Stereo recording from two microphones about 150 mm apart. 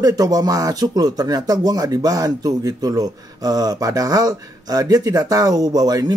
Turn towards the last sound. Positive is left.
turn(degrees=-25)  # may be behind; listen again after turning